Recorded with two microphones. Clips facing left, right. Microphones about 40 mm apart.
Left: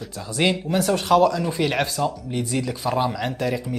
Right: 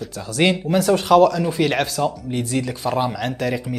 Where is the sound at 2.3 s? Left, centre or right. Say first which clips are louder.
Right 2 dB; centre.